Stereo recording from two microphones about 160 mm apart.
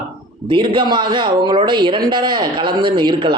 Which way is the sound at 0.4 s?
30° right (ahead or behind).